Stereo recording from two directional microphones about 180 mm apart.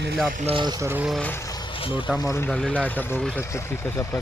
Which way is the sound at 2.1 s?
15° left (ahead or behind).